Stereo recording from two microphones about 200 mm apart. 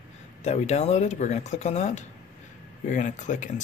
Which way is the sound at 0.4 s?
35° left (ahead or behind).